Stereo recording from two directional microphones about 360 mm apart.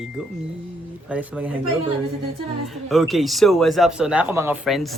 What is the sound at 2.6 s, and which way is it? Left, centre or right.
Speech, centre.